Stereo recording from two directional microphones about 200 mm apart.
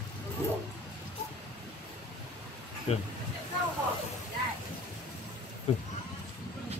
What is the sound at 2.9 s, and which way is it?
Speech, 30° left (ahead or behind).